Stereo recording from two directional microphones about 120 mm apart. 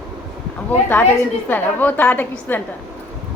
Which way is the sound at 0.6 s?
15° left (ahead or behind).